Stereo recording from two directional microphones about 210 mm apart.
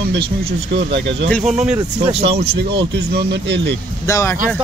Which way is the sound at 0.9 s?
55° right (ahead or behind).